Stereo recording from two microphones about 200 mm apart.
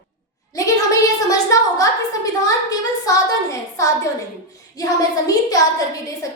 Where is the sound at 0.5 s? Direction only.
15° left (ahead or behind).